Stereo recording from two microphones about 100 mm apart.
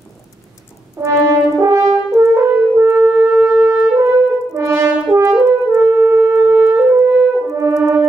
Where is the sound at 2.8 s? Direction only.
10° right (ahead or behind).